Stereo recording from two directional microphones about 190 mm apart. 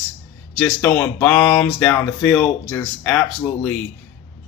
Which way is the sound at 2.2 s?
Centre (ahead or behind).